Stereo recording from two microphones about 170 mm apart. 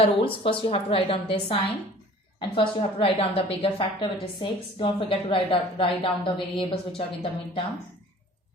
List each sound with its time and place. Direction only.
0.0 s a woman's voice: 35° left (ahead or behind)